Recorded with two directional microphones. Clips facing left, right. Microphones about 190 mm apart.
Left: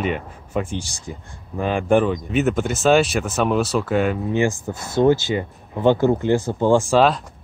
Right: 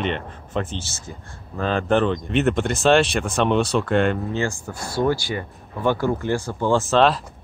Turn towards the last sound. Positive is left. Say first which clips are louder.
# left 3 dB
turn(degrees=15)  # may be behind; listen again after turning